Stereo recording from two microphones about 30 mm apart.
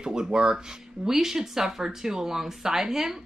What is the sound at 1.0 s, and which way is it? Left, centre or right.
Speech, centre.